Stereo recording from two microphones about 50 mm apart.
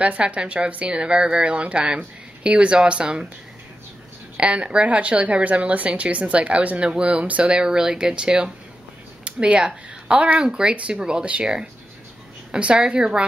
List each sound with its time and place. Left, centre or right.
0.0 s a woman's voice: right
4.4 s a woman's voice: right
9.2 s a sound: right
10.1 s a woman's voice: right
12.4 s a woman's voice: right